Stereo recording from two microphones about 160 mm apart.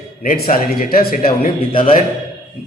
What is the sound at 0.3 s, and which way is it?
Speech, 65° left (ahead or behind).